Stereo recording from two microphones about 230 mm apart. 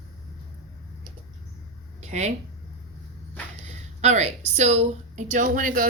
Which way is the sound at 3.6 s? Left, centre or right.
Right.